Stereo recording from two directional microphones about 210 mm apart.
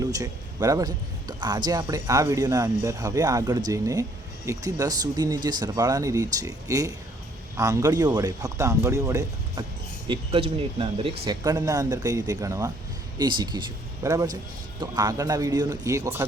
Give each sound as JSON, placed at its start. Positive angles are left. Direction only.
{"t": 0.0, "sound": "a man's voice", "side_deg": -15}